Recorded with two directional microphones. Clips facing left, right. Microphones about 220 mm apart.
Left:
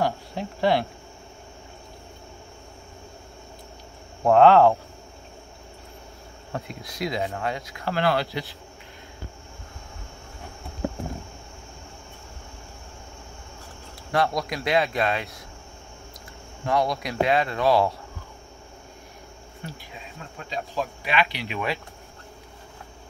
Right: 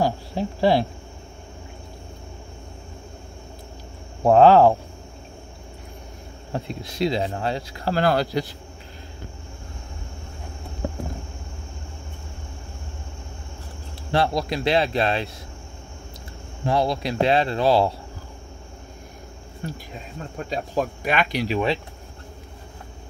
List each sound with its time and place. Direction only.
0.0 s speech: 30° right (ahead or behind)
4.2 s speech: 35° right (ahead or behind)
6.5 s speech: 30° right (ahead or behind)
14.1 s speech: 30° right (ahead or behind)
16.6 s speech: 30° right (ahead or behind)
19.6 s speech: 45° right (ahead or behind)